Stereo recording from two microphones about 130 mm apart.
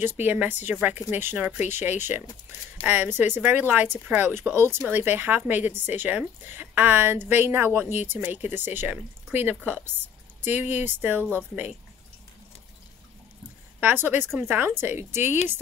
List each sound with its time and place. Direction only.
0.0 s speech: 15° right (ahead or behind)
13.7 s speech: 15° right (ahead or behind)